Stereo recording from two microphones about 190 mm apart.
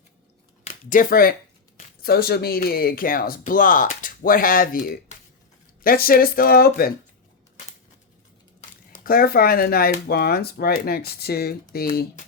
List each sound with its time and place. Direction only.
0.6 s speech: 45° left (ahead or behind)
9.0 s speech: 50° left (ahead or behind)